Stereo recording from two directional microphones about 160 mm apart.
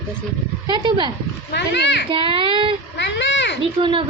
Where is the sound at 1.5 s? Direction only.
90° left.